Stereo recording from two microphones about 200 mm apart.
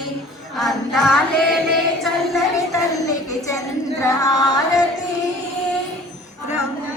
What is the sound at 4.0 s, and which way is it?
Music, 15° left (ahead or behind).